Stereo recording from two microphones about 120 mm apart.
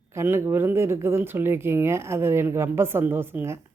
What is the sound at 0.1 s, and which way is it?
Speech, 20° right (ahead or behind).